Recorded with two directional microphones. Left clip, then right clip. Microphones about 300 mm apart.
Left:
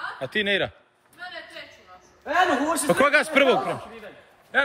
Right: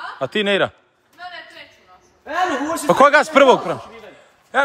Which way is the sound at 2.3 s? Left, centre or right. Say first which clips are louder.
Left 1 dB; centre.